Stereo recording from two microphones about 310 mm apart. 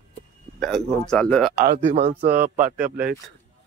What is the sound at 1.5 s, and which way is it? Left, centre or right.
Speech, right.